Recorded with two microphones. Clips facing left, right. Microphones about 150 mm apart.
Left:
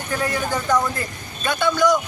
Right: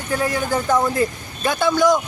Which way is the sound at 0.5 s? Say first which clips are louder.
Right 4 dB; 25° right (ahead or behind).